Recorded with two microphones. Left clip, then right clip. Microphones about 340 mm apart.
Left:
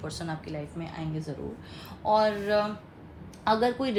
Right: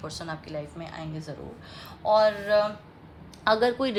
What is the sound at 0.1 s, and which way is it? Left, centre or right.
A woman's voice, centre.